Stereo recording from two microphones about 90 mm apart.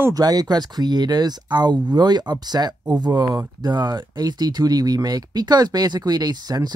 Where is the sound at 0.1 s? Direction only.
45° right (ahead or behind).